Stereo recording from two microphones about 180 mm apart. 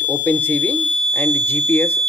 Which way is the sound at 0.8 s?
30° right (ahead or behind).